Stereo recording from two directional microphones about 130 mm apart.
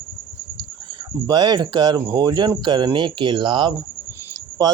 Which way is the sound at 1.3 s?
35° right (ahead or behind).